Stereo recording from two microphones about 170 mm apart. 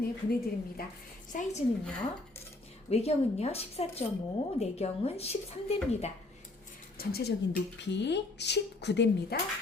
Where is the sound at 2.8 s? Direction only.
40° left (ahead or behind).